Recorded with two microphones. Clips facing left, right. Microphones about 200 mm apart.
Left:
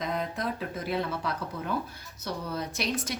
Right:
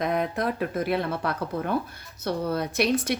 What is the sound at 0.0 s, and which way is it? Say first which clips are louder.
Speech: right 6 dB; 60° right (ahead or behind).